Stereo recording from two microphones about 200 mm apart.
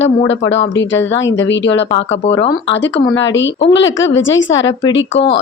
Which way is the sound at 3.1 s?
70° left (ahead or behind).